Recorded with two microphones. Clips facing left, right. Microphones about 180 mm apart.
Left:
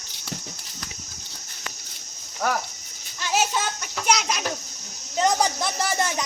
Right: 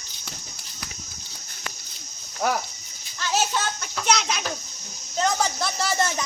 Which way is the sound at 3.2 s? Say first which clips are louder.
Left 1 dB; 10° left (ahead or behind).